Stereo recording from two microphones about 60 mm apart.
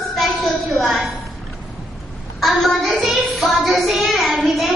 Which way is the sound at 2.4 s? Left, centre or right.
Centre.